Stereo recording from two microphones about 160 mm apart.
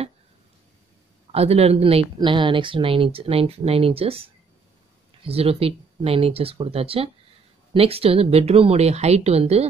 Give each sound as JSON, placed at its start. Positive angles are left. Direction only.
{"t": 1.3, "sound": "speech", "side_deg": -40}